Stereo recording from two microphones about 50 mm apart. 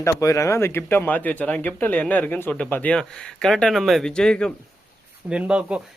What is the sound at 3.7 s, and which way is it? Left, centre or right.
Speech, centre.